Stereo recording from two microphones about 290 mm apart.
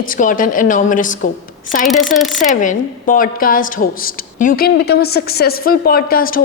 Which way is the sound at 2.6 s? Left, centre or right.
Left.